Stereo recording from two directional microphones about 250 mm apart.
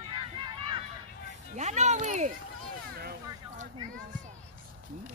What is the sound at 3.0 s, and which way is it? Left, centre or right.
Vehicle, right.